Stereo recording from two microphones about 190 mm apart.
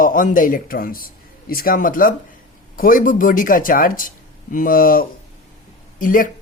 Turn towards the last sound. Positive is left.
turn(degrees=45)  # may be behind; listen again after turning